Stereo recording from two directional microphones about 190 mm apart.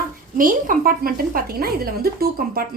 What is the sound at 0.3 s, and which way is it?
Speech, 45° right (ahead or behind).